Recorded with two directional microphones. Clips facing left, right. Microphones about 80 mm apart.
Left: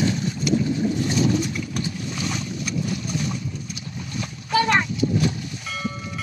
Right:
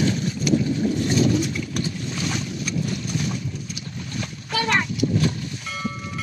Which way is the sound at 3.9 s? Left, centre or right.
Centre.